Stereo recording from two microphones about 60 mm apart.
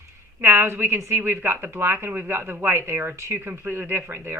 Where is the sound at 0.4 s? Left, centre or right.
Right.